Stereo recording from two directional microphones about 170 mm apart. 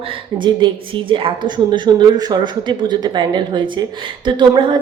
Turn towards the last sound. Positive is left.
turn(degrees=-25)  # may be behind; listen again after turning